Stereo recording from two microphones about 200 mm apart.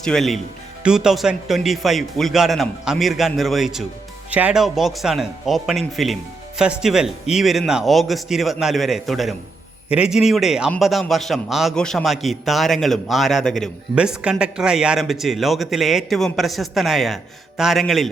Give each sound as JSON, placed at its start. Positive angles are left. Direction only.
{"t": 0.0, "sound": "a man's voice", "side_deg": 0}